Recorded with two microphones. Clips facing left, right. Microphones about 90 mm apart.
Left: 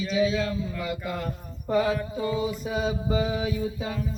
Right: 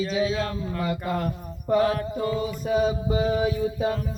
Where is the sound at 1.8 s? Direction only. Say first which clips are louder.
Right 1 dB; 55° right (ahead or behind).